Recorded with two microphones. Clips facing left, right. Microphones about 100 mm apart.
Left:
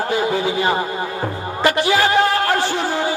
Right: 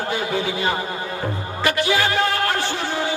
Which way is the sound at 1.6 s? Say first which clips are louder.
Left 4 dB; 25° left (ahead or behind).